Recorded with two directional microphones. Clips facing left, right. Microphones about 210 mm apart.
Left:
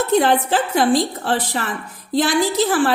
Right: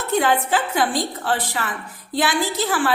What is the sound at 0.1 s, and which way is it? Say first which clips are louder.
A woman's voice: left 1 dB; 35° left (ahead or behind).